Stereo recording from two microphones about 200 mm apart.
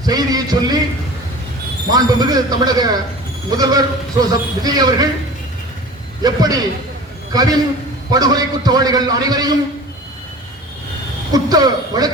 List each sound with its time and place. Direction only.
0.0 s speech: 20° right (ahead or behind)
1.9 s speech: 20° right (ahead or behind)
6.2 s speech: 20° right (ahead or behind)
11.3 s speech: 20° right (ahead or behind)